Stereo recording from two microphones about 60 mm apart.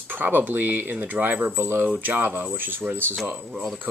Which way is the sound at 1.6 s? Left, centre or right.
Right.